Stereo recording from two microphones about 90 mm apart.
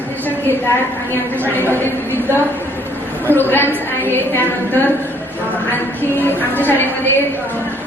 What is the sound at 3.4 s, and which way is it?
A woman's voice, 25° left (ahead or behind).